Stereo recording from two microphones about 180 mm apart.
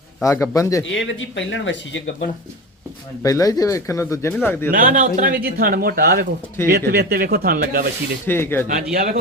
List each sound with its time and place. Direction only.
0.2 s speech: 15° left (ahead or behind)
0.9 s speech: 90° left
3.2 s speech: 20° left (ahead or behind)
4.7 s a man's voice: 50° right (ahead or behind)
8.3 s speech: 10° left (ahead or behind)
8.6 s a man's voice: 55° right (ahead or behind)